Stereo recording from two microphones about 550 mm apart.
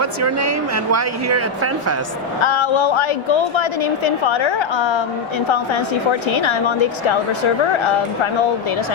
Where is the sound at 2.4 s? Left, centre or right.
Left.